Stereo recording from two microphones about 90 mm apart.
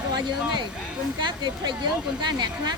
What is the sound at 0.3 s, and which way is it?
A woman's voice, 60° right (ahead or behind).